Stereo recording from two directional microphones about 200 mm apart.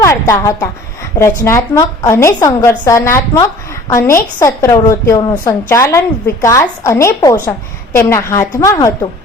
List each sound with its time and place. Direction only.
0.0 s a woman's voice: 15° left (ahead or behind)